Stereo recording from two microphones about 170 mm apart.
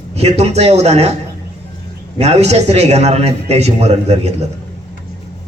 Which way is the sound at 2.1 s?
40° right (ahead or behind).